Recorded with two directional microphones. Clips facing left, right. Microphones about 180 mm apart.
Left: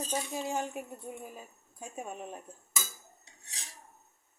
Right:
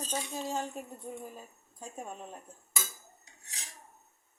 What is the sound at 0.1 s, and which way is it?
A woman's voice, 10° left (ahead or behind).